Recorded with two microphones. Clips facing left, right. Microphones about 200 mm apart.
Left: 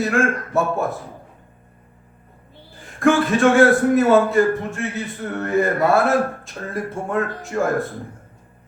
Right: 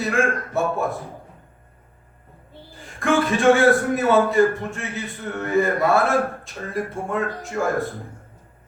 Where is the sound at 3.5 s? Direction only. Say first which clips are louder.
Left 4 dB; centre (ahead or behind).